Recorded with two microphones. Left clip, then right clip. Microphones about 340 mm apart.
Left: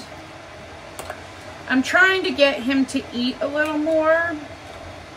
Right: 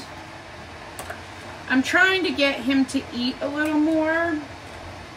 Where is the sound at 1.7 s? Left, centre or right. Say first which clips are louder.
Left 2 dB; centre.